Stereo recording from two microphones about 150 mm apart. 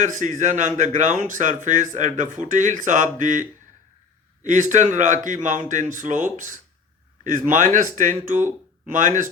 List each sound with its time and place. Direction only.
0.0 s speech: 60° right (ahead or behind)
4.4 s speech: 55° right (ahead or behind)